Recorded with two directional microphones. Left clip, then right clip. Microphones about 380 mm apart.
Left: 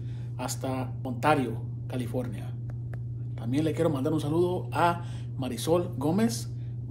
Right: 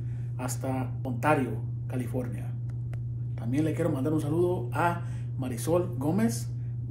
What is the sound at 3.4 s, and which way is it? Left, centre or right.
A man's voice, centre.